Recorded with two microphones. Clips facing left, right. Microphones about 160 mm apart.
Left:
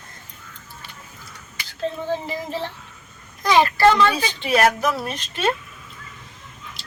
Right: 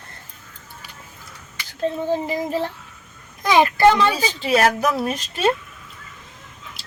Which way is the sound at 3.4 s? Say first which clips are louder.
Right 1 dB; 15° right (ahead or behind).